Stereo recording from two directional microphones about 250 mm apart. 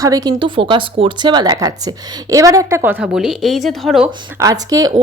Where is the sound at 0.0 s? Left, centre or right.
Centre.